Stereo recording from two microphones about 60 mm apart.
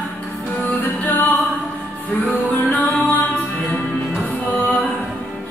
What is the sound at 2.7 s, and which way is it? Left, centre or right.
Music, left.